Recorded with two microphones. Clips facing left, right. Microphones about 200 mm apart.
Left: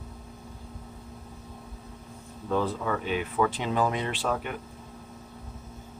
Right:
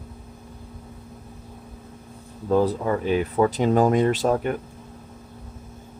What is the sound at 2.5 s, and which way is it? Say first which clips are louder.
Speech: right 7 dB; 35° right (ahead or behind).